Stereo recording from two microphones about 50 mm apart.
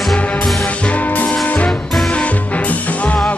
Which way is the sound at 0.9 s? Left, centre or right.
Left.